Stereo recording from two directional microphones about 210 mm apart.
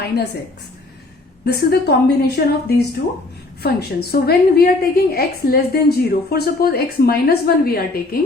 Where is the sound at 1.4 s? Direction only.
50° left (ahead or behind).